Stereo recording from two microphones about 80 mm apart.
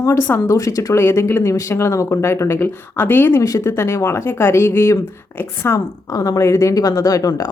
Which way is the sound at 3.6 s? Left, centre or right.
Left.